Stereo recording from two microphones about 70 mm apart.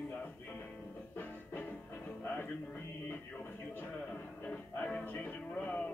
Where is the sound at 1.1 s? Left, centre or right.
Left.